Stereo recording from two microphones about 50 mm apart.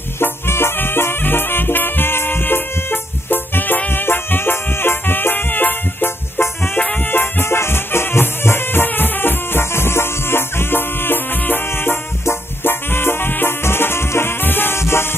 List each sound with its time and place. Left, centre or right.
0.2 s music: left
14.8 s music: left